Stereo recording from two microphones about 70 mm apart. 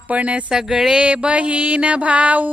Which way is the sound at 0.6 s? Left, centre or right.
Centre.